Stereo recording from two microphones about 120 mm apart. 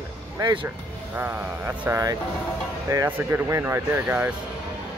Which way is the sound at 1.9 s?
20° right (ahead or behind).